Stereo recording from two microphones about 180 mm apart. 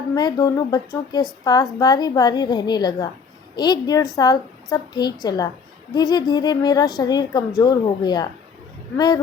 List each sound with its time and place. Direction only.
0.1 s a woman's voice: 20° left (ahead or behind)